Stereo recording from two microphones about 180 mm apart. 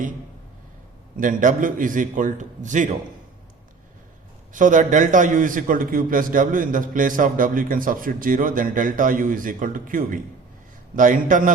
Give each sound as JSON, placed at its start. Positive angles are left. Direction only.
{"t": 1.1, "sound": "a man's voice", "side_deg": -50}
{"t": 4.5, "sound": "a man's voice", "side_deg": -45}